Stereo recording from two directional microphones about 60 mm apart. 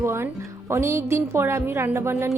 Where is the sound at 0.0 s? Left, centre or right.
Right.